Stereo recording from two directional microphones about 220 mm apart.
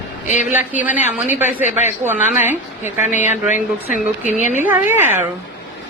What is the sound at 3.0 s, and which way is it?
Speech, 35° left (ahead or behind).